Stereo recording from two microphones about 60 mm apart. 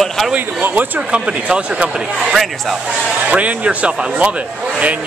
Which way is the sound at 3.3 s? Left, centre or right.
Right.